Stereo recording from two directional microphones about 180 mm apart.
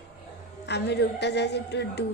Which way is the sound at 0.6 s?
70° left (ahead or behind).